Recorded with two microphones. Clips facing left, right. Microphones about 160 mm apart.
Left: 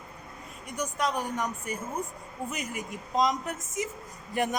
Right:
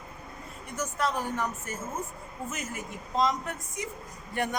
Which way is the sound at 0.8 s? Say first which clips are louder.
Even; 15° left (ahead or behind).